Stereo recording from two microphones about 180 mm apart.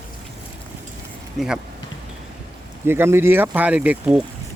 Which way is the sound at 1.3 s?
5° right (ahead or behind).